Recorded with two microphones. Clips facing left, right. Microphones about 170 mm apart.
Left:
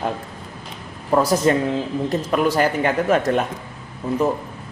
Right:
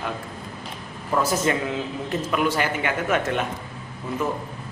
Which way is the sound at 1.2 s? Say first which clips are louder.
Left 5 dB; 35° left (ahead or behind).